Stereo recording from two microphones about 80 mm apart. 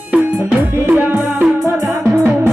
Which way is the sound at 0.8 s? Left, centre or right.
Right.